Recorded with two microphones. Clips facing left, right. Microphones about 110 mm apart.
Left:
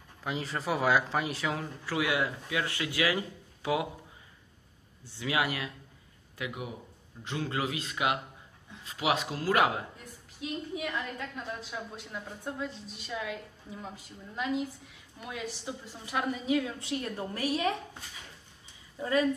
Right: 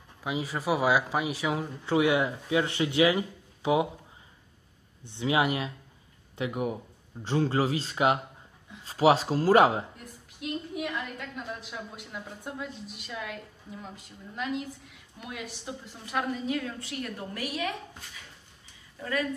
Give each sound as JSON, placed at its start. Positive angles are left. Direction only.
{"t": 0.2, "sound": "speech", "side_deg": -10}
{"t": 1.9, "sound": "speech", "side_deg": -25}
{"t": 5.0, "sound": "speech", "side_deg": -20}
{"t": 9.9, "sound": "a woman's voice", "side_deg": 0}
{"t": 16.4, "sound": "a woman's voice", "side_deg": 15}
{"t": 16.9, "sound": "a woman's voice", "side_deg": 30}
{"t": 18.9, "sound": "speech", "side_deg": 25}